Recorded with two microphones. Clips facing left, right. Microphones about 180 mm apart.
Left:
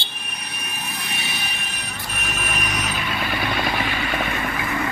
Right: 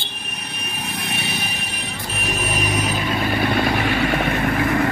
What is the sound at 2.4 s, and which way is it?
Vehicle, 30° right (ahead or behind).